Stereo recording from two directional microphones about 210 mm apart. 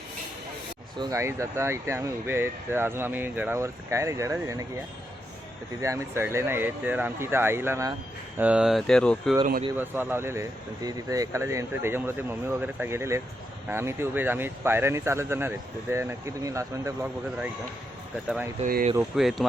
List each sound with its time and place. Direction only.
0.9 s speech: 15° right (ahead or behind)
5.8 s speech: 15° right (ahead or behind); by 9.3 s 5° left (ahead or behind)
9.7 s speech: 10° right (ahead or behind)
18.6 s speech: 40° right (ahead or behind)
18.9 s speech: centre (ahead or behind)